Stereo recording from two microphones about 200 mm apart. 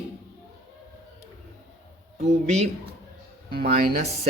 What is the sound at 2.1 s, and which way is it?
Speech, 35° right (ahead or behind).